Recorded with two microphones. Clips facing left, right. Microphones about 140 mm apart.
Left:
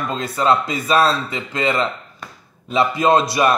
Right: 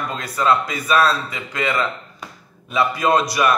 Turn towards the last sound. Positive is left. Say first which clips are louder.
# left 2 dB
turn(degrees=25)  # may be behind; listen again after turning